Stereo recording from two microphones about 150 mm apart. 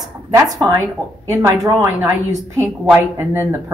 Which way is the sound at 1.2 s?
20° right (ahead or behind).